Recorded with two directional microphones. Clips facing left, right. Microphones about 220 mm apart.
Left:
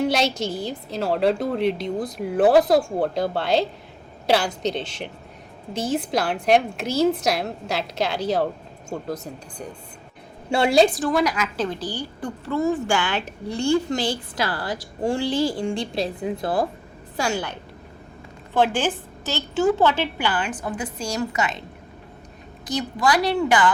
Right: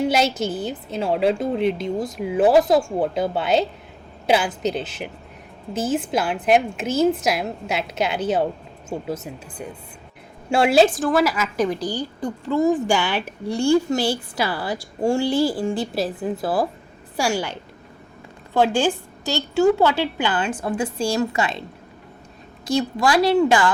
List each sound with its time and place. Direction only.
0.0 s a woman's voice: 5° right (ahead or behind); by 21.5 s 30° right (ahead or behind)
22.6 s a woman's voice: 25° right (ahead or behind)